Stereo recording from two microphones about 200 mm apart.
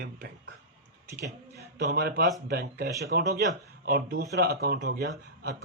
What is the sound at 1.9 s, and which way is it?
Speech, 50° right (ahead or behind).